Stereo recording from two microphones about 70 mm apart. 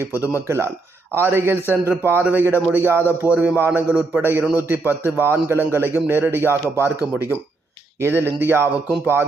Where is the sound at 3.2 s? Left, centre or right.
Right.